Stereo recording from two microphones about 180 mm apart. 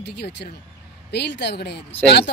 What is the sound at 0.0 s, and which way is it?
Speech, 70° left (ahead or behind).